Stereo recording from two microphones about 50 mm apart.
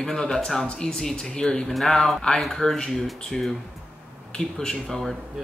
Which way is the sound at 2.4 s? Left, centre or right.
Centre.